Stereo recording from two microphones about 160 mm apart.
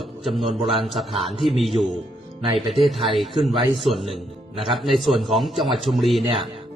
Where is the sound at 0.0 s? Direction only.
Centre (ahead or behind).